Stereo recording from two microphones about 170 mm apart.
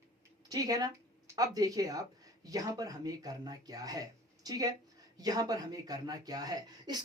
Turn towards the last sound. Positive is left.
turn(degrees=-25)  # may be behind; listen again after turning